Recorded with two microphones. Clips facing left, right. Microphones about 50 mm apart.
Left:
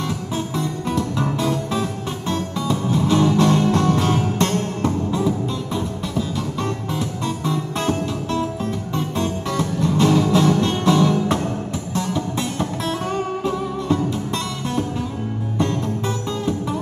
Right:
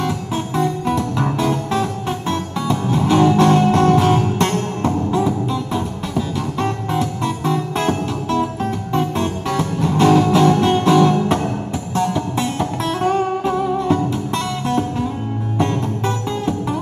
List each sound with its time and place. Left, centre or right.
0.0 s music: right
12.8 s music: right
14.7 s music: centre